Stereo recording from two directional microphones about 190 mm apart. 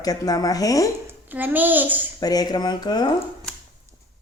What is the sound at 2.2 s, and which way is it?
Speech, 20° left (ahead or behind).